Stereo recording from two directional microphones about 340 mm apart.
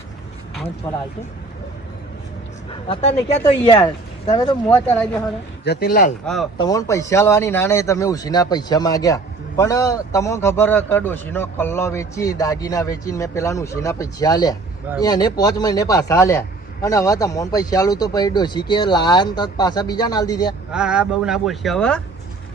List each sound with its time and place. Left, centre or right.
2.9 s speech: centre
5.6 s speech: left
6.2 s speech: centre
20.7 s speech: centre